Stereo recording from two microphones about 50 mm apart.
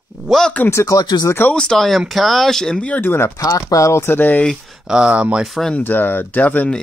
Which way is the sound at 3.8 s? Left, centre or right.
Left.